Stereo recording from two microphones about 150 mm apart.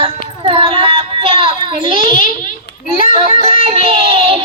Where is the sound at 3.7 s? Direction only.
35° right (ahead or behind).